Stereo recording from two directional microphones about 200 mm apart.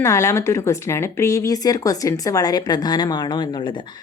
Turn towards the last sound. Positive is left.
turn(degrees=25)  # may be behind; listen again after turning